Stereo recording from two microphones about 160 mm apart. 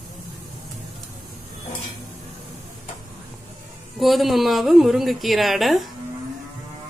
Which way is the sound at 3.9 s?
Centre (ahead or behind).